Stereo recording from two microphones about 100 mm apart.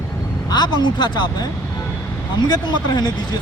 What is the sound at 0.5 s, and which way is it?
Speech, 45° left (ahead or behind).